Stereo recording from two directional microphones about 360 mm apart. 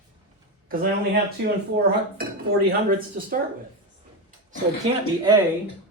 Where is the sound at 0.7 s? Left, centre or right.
Right.